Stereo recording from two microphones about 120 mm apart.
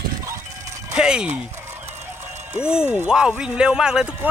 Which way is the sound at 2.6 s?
5° right (ahead or behind).